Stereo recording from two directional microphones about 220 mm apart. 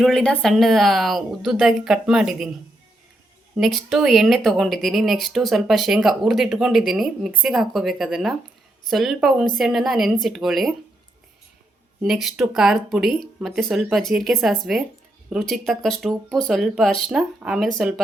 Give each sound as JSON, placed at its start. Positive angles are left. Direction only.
{"t": 0.0, "sound": "speech", "side_deg": 5}
{"t": 3.6, "sound": "speech", "side_deg": 0}
{"t": 12.0, "sound": "speech", "side_deg": 0}